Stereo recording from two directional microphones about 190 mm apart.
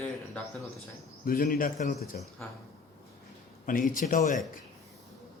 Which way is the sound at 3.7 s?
45° left (ahead or behind).